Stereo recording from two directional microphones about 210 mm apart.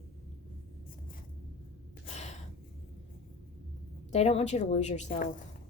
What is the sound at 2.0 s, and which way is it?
Gasp, 30° left (ahead or behind).